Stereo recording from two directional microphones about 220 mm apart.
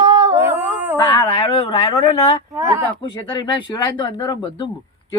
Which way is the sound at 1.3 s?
25° left (ahead or behind).